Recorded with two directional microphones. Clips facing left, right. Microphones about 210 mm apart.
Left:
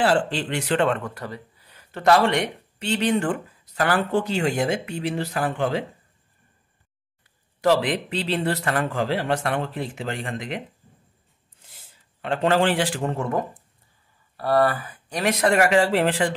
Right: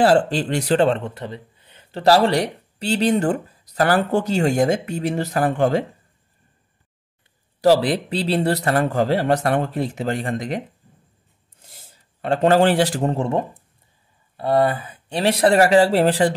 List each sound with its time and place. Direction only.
0.0 s speech: 40° right (ahead or behind)
7.6 s speech: 35° right (ahead or behind)
11.6 s a man's voice: 40° right (ahead or behind)